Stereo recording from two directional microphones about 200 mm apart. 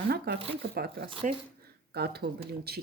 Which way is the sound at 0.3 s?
50° right (ahead or behind).